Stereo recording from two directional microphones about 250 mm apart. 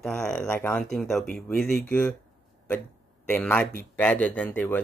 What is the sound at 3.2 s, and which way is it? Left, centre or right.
Speech, centre.